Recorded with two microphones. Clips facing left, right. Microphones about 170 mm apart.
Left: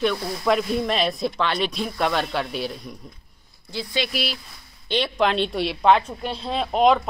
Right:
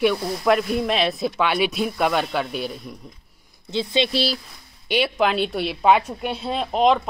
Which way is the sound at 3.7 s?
20° right (ahead or behind).